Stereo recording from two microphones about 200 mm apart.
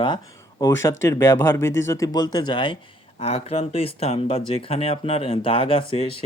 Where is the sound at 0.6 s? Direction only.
15° left (ahead or behind).